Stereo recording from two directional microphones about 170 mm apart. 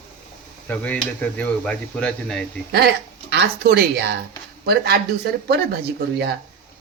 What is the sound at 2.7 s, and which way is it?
A woman's voice, 75° right (ahead or behind).